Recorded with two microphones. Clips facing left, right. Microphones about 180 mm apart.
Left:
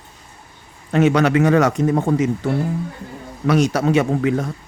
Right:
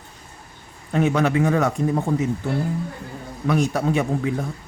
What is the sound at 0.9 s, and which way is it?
Speech, 85° left.